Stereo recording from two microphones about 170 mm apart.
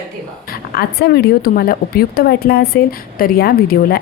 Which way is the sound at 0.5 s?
65° left (ahead or behind).